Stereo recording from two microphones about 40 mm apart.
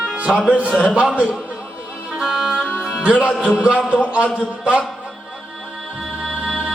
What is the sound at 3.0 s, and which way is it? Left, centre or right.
Speech, right.